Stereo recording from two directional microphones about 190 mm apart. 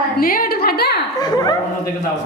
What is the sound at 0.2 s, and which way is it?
Speech, 50° left (ahead or behind).